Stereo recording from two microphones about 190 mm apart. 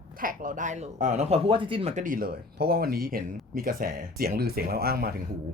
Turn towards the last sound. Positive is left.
turn(degrees=-55)  # may be behind; listen again after turning